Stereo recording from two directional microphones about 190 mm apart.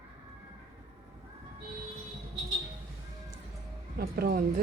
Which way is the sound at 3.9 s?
50° right (ahead or behind).